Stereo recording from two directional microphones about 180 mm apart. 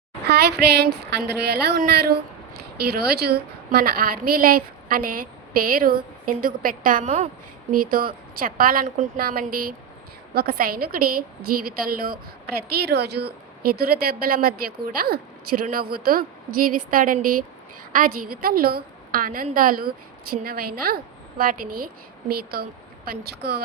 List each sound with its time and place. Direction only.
0.3 s a woman's voice: 65° right (ahead or behind)
12.7 s a woman's voice: 65° right (ahead or behind)